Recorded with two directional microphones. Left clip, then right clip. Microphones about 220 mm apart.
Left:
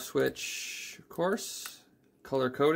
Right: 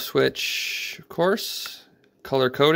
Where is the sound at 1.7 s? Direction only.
35° right (ahead or behind).